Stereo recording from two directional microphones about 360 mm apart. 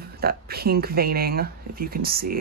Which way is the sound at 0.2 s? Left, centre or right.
Right.